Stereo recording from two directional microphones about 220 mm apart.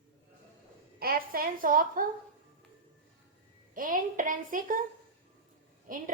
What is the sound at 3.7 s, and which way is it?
A woman's voice, 40° right (ahead or behind).